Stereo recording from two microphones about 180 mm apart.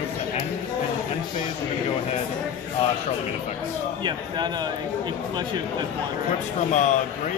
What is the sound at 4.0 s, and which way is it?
Speech, 25° right (ahead or behind).